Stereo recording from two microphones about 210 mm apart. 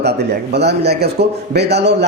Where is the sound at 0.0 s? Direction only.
50° right (ahead or behind).